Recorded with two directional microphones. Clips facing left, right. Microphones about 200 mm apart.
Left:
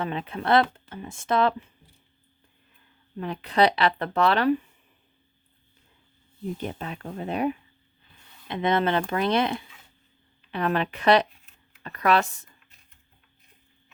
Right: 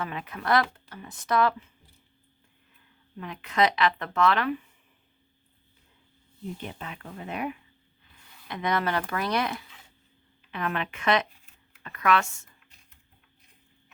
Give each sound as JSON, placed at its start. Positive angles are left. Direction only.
{"t": 0.0, "sound": "speech", "side_deg": 30}
{"t": 3.2, "sound": "speech", "side_deg": 35}
{"t": 6.6, "sound": "speech", "side_deg": 40}